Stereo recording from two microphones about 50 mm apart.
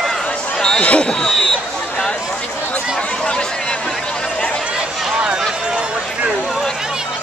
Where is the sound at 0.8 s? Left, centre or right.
Left.